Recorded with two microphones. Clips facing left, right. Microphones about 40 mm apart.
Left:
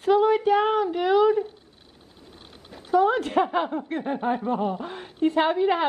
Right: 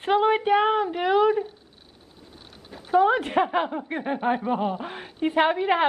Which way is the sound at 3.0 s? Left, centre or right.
Right.